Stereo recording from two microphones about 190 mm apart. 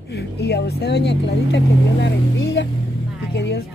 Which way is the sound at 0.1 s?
60° left (ahead or behind).